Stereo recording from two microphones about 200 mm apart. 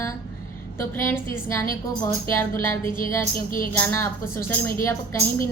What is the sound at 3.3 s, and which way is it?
Music, 45° left (ahead or behind).